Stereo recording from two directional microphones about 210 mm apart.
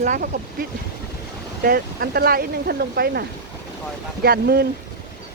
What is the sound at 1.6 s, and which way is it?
Speech, 45° right (ahead or behind).